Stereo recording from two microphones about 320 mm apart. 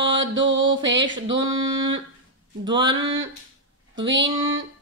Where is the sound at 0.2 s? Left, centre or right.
Right.